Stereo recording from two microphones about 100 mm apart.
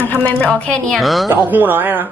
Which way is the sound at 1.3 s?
20° right (ahead or behind).